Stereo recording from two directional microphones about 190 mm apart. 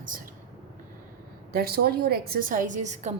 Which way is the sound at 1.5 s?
55° right (ahead or behind).